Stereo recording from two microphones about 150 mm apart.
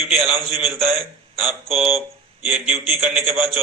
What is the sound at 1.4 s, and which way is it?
A man's voice, centre (ahead or behind).